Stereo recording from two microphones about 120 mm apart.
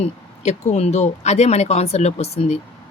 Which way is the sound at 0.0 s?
65° left (ahead or behind).